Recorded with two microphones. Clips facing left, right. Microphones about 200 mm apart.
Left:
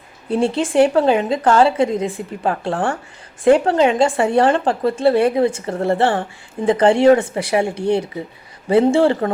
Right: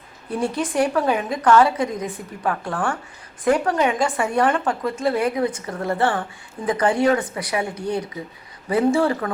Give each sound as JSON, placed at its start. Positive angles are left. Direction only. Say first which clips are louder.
{"t": 0.3, "sound": "speech", "louder": "left 6 dB", "side_deg": 25}